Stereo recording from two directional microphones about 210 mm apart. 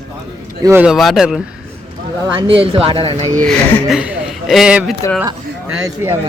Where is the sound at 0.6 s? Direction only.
10° right (ahead or behind).